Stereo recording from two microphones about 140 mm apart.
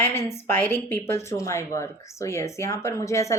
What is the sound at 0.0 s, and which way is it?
A woman's voice, 15° left (ahead or behind).